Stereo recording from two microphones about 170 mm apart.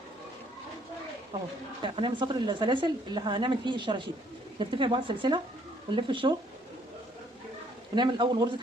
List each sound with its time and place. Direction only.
1.8 s a woman's voice: 30° right (ahead or behind)
7.9 s a woman's voice: 25° right (ahead or behind)